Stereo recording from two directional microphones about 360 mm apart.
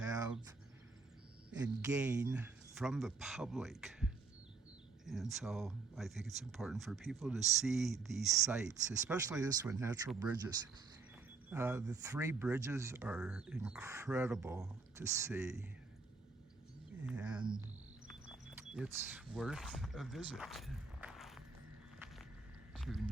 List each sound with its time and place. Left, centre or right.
1.5 s speech: centre
11.4 s speech: centre
17.1 s speech: centre
18.5 s vehicle: centre
19.3 s speech: centre
21.9 s a sound: centre